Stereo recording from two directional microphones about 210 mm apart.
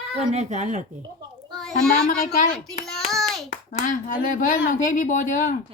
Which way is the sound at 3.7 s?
35° left (ahead or behind).